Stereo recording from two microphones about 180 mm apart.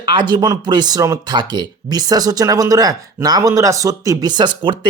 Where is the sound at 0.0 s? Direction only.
25° right (ahead or behind).